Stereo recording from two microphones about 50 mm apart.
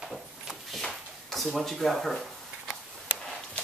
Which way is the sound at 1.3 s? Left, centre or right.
Centre.